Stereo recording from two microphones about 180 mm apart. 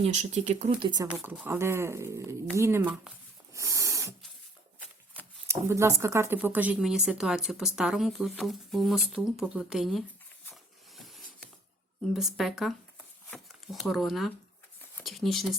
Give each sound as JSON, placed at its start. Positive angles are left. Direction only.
{"t": 0.0, "sound": "speech", "side_deg": -40}
{"t": 1.0, "sound": "speech", "side_deg": -10}
{"t": 3.5, "sound": "snort", "side_deg": -15}
{"t": 5.5, "sound": "speech", "side_deg": -15}
{"t": 10.5, "sound": "a sound", "side_deg": 0}
{"t": 12.1, "sound": "speech", "side_deg": 0}